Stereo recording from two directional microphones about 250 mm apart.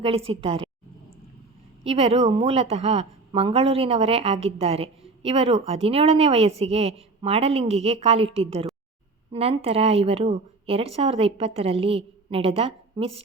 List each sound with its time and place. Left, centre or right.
0.0 s a woman's voice: right
1.8 s a woman's voice: right